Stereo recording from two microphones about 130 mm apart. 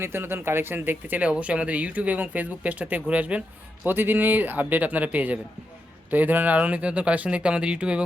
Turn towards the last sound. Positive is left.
turn(degrees=-10)  # may be behind; listen again after turning